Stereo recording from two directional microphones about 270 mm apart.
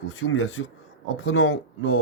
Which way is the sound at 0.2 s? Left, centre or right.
Left.